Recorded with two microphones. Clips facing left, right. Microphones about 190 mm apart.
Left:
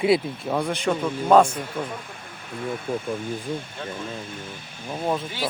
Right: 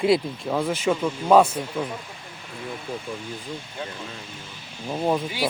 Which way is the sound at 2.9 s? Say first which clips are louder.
Left 5 dB; 55° left (ahead or behind).